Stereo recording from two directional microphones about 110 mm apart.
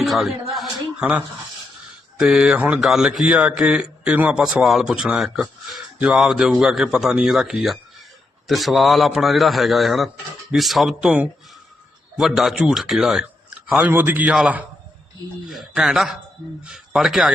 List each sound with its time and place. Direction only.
0.0 s a sound: centre (ahead or behind)
2.1 s a man's voice: 5° right (ahead or behind)
13.8 s a man's voice: 15° right (ahead or behind)